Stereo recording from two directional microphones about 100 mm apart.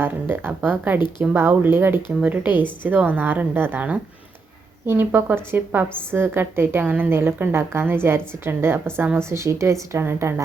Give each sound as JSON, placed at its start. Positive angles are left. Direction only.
{"t": 0.0, "sound": "a woman's voice", "side_deg": -20}